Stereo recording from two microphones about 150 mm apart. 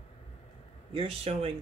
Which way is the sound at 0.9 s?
40° right (ahead or behind).